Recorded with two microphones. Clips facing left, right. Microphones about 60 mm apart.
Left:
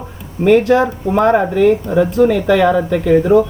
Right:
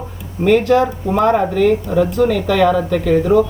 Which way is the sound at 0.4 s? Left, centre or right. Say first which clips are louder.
Left 2 dB; left.